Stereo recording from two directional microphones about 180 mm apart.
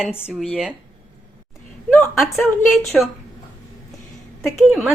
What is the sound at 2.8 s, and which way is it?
Speech, centre (ahead or behind).